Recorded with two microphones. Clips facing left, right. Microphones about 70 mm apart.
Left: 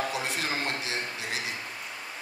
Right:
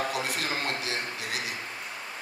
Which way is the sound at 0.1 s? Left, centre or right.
Left.